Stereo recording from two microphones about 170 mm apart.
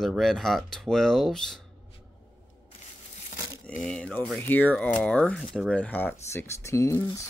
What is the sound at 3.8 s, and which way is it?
Speech, 5° left (ahead or behind).